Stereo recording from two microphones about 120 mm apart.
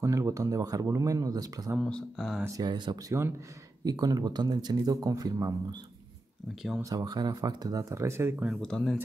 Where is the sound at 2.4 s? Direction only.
30° right (ahead or behind).